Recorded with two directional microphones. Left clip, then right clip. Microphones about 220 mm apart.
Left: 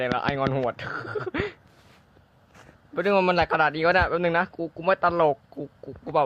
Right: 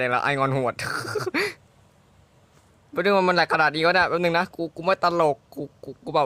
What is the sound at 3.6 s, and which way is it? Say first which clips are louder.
Speech: right 1 dB; 30° right (ahead or behind).